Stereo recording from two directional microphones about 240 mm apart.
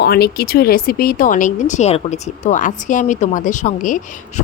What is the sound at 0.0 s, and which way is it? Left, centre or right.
Speech, left.